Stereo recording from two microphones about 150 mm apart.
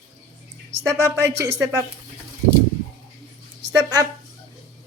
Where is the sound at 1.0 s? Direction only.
20° right (ahead or behind).